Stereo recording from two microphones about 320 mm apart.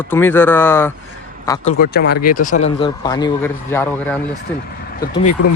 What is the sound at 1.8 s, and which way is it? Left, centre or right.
Speech, left.